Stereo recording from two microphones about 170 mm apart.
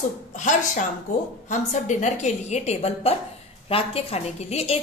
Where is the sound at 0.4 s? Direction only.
45° left (ahead or behind).